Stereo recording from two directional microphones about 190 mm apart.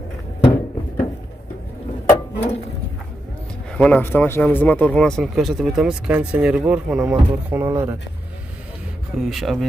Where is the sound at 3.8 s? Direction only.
10° left (ahead or behind); by 8.0 s 15° right (ahead or behind).